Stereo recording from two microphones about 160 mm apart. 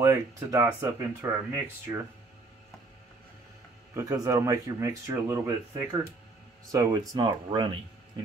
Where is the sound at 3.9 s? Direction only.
20° right (ahead or behind).